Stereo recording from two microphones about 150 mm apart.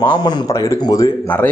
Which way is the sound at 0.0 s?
25° left (ahead or behind).